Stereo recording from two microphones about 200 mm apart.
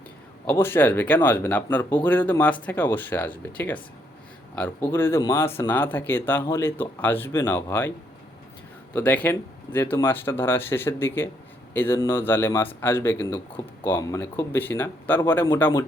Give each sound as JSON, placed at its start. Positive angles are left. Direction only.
{"t": 0.4, "sound": "speech", "side_deg": 10}